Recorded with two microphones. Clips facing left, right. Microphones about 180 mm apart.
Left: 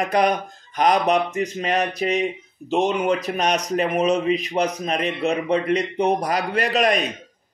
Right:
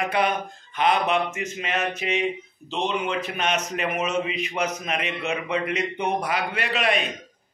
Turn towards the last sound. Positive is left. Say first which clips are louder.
# left 5 dB
turn(degrees=40)  # may be behind; listen again after turning